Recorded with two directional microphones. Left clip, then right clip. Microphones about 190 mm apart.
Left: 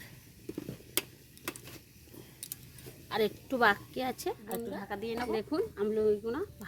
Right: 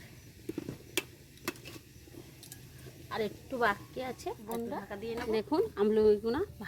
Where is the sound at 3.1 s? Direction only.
65° left (ahead or behind).